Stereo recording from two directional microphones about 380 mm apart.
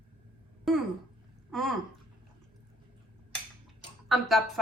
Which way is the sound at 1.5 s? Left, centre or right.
Centre.